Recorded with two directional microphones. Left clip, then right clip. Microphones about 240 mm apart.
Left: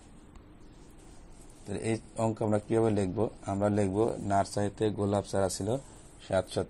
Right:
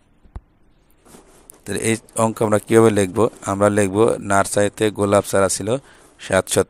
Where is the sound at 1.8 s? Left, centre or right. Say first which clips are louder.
Right 12 dB; right.